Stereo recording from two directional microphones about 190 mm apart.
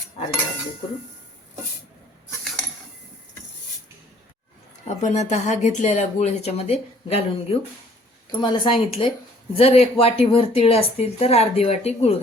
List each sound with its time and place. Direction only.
4.9 s speech: 35° left (ahead or behind)